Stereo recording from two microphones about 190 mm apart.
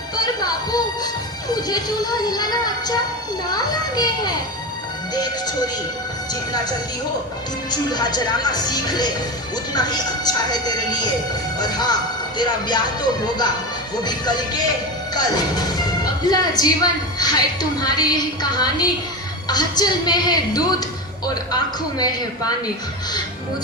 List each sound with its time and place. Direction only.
0.2 s speech: 20° left (ahead or behind)
7.7 s speech: 20° left (ahead or behind)
12.4 s speech: 20° left (ahead or behind)
15.1 s music: 20° left (ahead or behind)
16.2 s speech: 20° left (ahead or behind)